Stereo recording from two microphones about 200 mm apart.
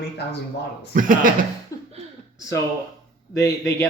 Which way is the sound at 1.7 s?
15° left (ahead or behind).